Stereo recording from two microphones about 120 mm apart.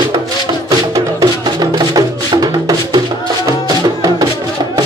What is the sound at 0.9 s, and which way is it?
Music, 30° right (ahead or behind).